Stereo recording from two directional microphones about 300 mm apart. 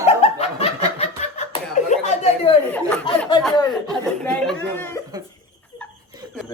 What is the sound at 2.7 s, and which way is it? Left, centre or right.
Speech, centre.